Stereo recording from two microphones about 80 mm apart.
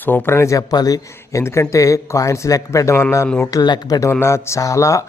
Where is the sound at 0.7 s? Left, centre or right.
Left.